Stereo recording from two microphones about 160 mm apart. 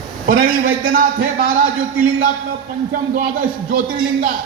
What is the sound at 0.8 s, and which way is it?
Speech, 55° right (ahead or behind).